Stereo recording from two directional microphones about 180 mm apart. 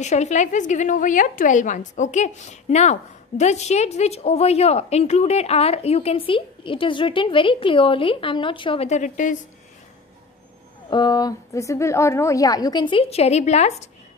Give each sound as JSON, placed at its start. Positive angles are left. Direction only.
{"t": 0.0, "sound": "a woman's voice", "side_deg": 40}
{"t": 10.9, "sound": "a woman's voice", "side_deg": 25}